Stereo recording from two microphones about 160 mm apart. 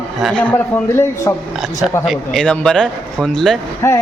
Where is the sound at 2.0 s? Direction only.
Centre (ahead or behind).